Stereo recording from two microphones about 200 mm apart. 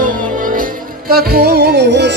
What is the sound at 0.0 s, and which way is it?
Music, 45° right (ahead or behind).